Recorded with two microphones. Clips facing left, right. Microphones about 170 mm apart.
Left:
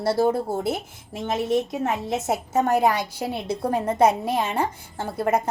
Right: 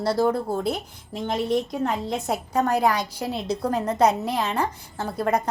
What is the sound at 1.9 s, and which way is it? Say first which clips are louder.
A woman's voice: left 1 dB; 25° left (ahead or behind).